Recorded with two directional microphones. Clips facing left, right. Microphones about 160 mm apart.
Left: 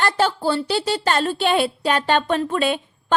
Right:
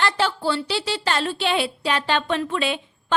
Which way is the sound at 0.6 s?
45° left (ahead or behind).